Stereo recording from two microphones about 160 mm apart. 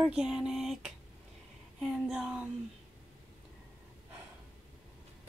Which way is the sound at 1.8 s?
5° right (ahead or behind).